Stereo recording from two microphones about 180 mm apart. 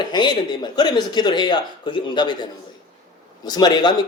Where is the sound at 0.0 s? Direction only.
25° left (ahead or behind).